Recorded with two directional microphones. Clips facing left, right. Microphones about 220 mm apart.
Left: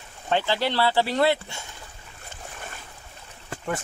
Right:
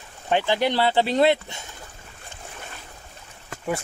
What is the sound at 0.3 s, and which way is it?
Speech, 15° right (ahead or behind).